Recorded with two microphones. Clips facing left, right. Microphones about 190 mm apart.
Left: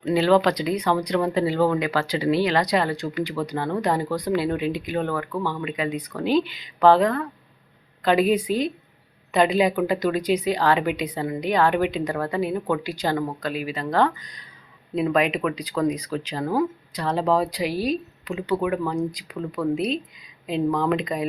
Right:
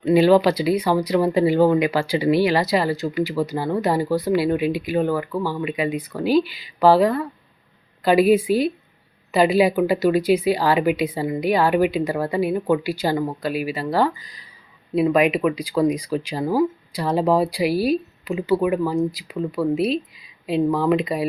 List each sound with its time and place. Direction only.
0.0 s speech: 15° right (ahead or behind)